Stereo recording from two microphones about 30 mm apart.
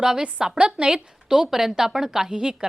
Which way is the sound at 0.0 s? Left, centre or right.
Right.